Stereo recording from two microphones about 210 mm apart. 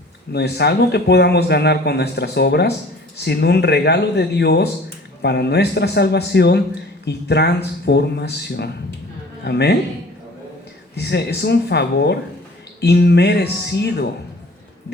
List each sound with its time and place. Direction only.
0.3 s speech: 50° left (ahead or behind)
10.9 s speech: 50° left (ahead or behind)